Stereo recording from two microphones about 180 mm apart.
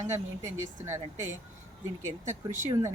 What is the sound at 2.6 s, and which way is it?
Speech, 15° right (ahead or behind).